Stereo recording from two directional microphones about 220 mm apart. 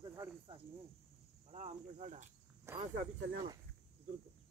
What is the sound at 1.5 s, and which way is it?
Speech, 30° right (ahead or behind).